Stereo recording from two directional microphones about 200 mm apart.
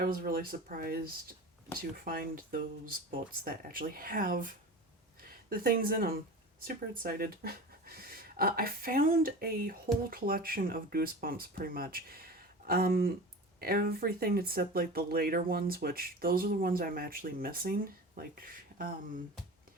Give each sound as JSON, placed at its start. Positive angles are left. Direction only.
{"t": 0.0, "sound": "speech", "side_deg": -45}